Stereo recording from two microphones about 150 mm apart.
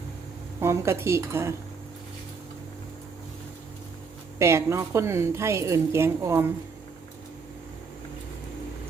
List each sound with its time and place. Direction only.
0.6 s a woman's voice: 15° right (ahead or behind)
4.4 s a woman's voice: 20° right (ahead or behind)